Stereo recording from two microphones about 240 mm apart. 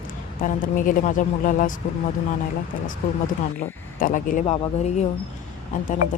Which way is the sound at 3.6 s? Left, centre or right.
Left.